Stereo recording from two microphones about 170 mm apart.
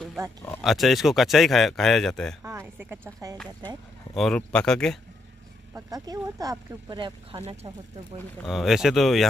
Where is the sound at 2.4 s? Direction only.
15° right (ahead or behind).